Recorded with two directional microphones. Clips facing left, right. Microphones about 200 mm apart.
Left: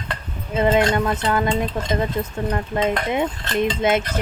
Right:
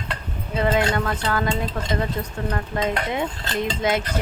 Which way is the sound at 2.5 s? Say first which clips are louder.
Left 3 dB; 20° left (ahead or behind).